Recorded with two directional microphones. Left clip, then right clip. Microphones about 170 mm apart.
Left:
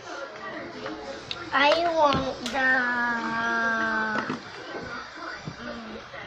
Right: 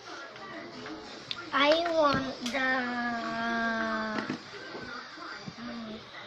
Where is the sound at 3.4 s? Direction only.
20° right (ahead or behind).